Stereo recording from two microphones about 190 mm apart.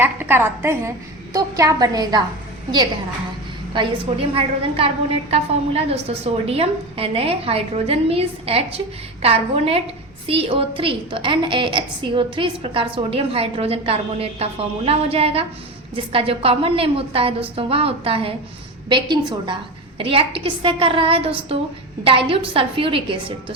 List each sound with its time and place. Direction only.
0.0 s a woman's voice: 10° right (ahead or behind)
3.8 s a woman's voice: 30° right (ahead or behind)